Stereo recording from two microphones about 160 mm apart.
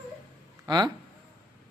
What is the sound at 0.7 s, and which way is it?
Speech, 25° right (ahead or behind).